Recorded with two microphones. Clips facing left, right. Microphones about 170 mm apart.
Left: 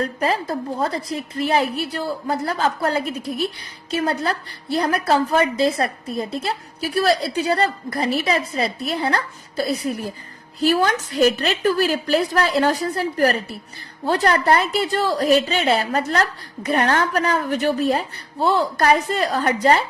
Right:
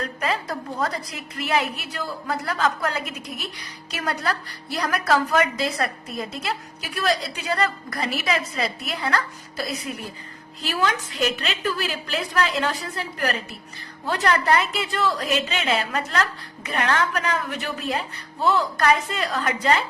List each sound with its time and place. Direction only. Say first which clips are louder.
0.0 s a woman's voice: left 5 dB; 30° left (ahead or behind)